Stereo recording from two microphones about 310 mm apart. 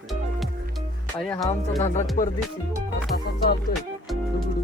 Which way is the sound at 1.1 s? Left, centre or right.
Centre.